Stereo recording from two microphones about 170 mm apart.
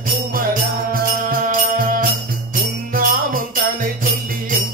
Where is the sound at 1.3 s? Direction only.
55° right (ahead or behind).